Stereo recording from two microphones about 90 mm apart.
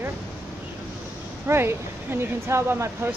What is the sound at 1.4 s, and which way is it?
Speech, 30° right (ahead or behind).